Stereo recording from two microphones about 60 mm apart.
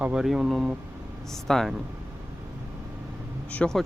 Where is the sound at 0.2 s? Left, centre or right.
Centre.